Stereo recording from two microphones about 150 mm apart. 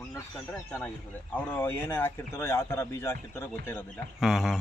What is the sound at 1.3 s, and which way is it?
Speech, 15° left (ahead or behind).